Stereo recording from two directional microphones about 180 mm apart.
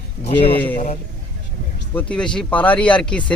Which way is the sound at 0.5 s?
10° left (ahead or behind).